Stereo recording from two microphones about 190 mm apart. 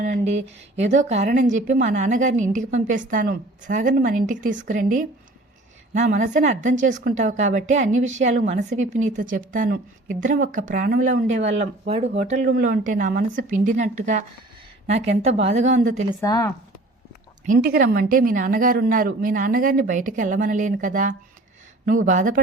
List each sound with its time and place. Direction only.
0.0 s a woman's voice: 40° right (ahead or behind)
11.6 s a woman's voice: 35° right (ahead or behind)
12.5 s a woman's voice: 50° right (ahead or behind)
16.2 s speech: 15° left (ahead or behind)
17.4 s a woman's voice: 50° right (ahead or behind)